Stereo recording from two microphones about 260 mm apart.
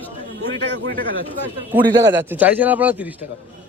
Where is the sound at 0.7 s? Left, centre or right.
Right.